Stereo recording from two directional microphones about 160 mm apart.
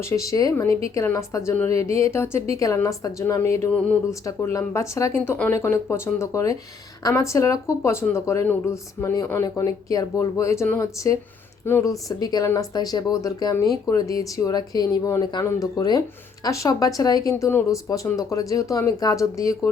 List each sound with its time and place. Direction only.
0.1 s speech: 20° left (ahead or behind)